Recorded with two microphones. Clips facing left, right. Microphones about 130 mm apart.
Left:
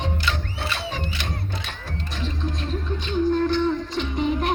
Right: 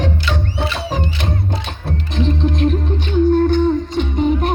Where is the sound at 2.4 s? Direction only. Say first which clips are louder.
Right 11 dB; 85° right.